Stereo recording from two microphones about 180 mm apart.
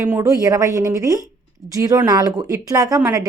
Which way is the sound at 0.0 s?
15° right (ahead or behind).